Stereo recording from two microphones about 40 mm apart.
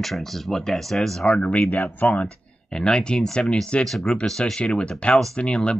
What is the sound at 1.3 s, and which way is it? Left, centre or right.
Speech, left.